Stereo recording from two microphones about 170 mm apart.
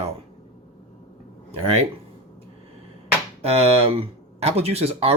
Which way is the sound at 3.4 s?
35° right (ahead or behind).